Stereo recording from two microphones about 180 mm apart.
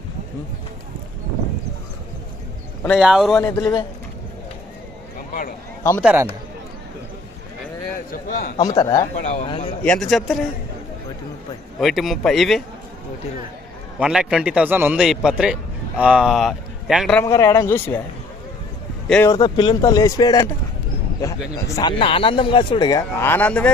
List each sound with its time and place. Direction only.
3.0 s a man's voice: centre (ahead or behind)
3.4 s speech: 15° left (ahead or behind)
5.3 s a man's voice: 50° left (ahead or behind)
6.0 s speech: 10° right (ahead or behind)
8.1 s a man's voice: 55° left (ahead or behind)
8.5 s speech: 20° left (ahead or behind)
9.1 s speech: 40° left (ahead or behind)
9.8 s a man's voice: 5° left (ahead or behind)
11.8 s a man's voice: centre (ahead or behind)
14.0 s a man's voice: 5° right (ahead or behind)
17.2 s speech: 15° left (ahead or behind)
19.0 s speech: 5° left (ahead or behind)
19.3 s speech: 25° left (ahead or behind); by 23.7 s 5° left (ahead or behind)